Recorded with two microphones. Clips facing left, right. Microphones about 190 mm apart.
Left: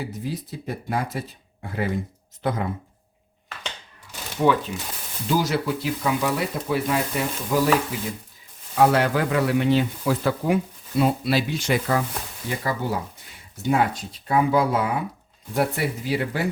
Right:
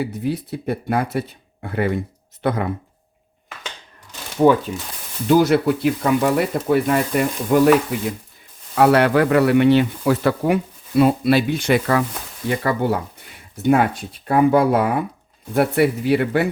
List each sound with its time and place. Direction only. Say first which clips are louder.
0.0 s speech: right 7 dB; 65° right (ahead or behind)
4.4 s speech: right 6 dB; 35° right (ahead or behind)
5.3 s speech: right 8 dB; 60° right (ahead or behind)
8.7 s speech: right 5 dB; 65° right (ahead or behind)